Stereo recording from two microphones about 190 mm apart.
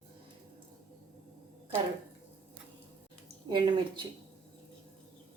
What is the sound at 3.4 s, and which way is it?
Speech, 25° right (ahead or behind).